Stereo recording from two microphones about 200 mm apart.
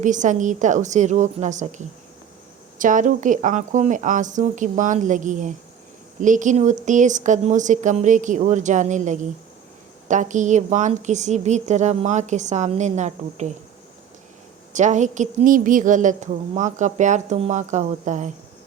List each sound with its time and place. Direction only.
0.0 s a woman's voice: 40° right (ahead or behind)
14.7 s a woman's voice: 35° right (ahead or behind)